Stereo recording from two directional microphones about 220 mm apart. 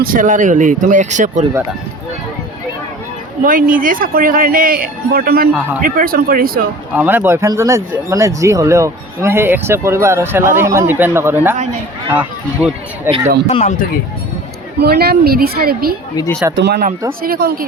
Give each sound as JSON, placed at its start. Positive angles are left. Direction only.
{"t": 0.0, "sound": "speech", "side_deg": -40}
{"t": 3.4, "sound": "speech", "side_deg": -40}
{"t": 6.9, "sound": "speech", "side_deg": -10}
{"t": 13.1, "sound": "speech", "side_deg": -25}
{"t": 13.5, "sound": "speech", "side_deg": 30}
{"t": 14.8, "sound": "speech", "side_deg": -45}